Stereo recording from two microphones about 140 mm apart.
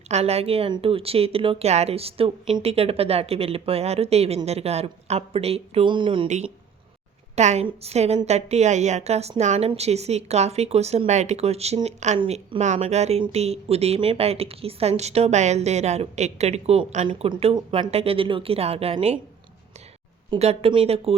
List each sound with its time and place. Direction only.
0.1 s a woman's voice: 50° right (ahead or behind)
6.2 s a woman's voice: 55° right (ahead or behind)
20.4 s a woman's voice: 45° right (ahead or behind)